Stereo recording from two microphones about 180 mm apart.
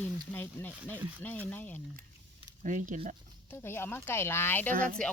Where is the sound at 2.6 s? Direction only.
45° right (ahead or behind).